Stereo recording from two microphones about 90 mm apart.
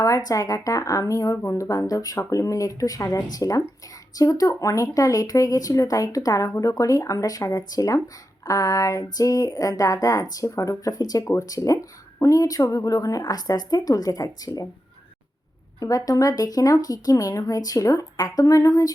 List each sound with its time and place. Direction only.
0.0 s speech: 40° left (ahead or behind)
15.8 s speech: 40° left (ahead or behind)